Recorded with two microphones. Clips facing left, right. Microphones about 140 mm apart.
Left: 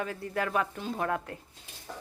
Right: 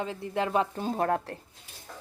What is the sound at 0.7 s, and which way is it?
Speech, 45° right (ahead or behind).